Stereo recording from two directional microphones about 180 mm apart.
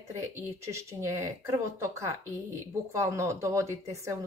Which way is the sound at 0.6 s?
15° right (ahead or behind).